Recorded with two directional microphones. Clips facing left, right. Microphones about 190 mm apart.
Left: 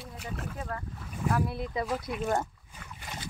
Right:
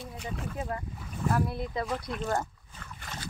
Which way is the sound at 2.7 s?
10° left (ahead or behind).